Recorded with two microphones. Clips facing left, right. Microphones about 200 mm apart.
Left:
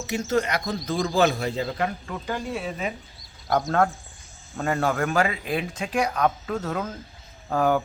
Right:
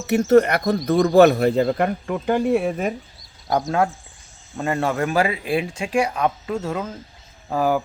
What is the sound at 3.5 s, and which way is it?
Speech, centre (ahead or behind).